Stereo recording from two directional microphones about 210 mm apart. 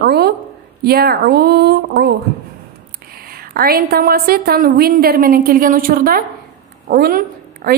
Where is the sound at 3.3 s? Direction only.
45° right (ahead or behind).